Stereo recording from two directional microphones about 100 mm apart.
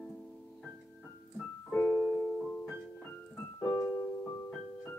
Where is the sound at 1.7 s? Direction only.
10° left (ahead or behind).